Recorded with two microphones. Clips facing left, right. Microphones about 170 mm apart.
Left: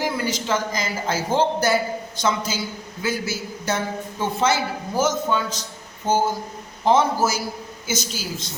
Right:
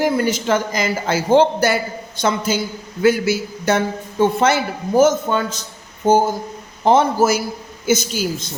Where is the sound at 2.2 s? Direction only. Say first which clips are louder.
Right 5 dB; 55° right (ahead or behind).